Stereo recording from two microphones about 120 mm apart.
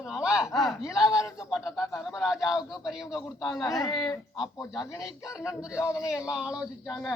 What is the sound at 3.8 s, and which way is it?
Speech, 40° left (ahead or behind).